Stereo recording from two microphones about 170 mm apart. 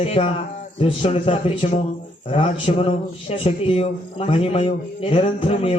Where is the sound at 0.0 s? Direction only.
35° left (ahead or behind).